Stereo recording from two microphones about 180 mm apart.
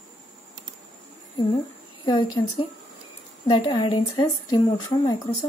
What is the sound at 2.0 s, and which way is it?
Speech, 20° left (ahead or behind).